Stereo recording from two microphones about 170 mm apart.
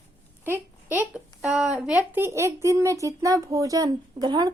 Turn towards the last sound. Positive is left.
turn(degrees=-25)  # may be behind; listen again after turning